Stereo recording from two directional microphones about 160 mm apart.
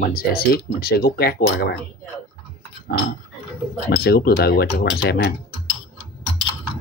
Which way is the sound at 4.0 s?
80° left.